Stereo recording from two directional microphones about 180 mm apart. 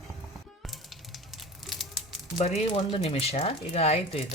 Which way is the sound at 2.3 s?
35° left (ahead or behind).